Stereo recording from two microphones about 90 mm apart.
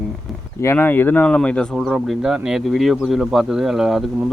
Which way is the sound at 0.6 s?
25° left (ahead or behind).